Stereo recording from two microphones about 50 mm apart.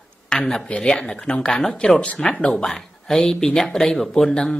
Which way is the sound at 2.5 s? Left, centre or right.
Centre.